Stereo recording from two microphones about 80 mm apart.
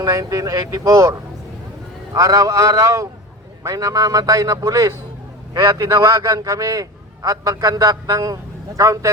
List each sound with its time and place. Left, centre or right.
0.0 s a man's voice: right